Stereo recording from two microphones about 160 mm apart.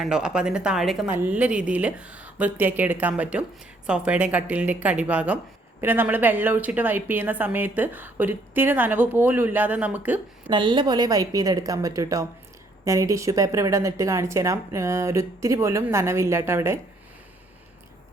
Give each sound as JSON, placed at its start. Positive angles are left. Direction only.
{"t": 0.0, "sound": "a woman's voice", "side_deg": -5}
{"t": 10.5, "sound": "a woman's voice", "side_deg": -30}